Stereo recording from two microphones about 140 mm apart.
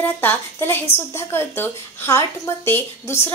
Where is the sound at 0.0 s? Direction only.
15° left (ahead or behind).